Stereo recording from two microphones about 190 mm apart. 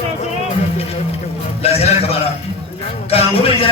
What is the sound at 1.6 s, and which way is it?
A man's voice, 30° left (ahead or behind).